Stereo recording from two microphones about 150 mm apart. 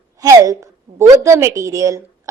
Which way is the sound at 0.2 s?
20° right (ahead or behind).